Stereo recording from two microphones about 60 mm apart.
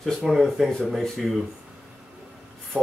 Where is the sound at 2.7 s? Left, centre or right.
Left.